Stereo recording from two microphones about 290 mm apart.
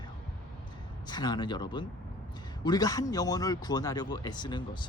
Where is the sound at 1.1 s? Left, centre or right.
Centre.